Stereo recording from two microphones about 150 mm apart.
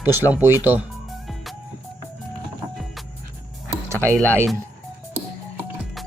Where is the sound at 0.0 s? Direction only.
10° right (ahead or behind).